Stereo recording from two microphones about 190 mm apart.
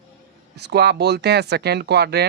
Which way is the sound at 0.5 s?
60° right (ahead or behind).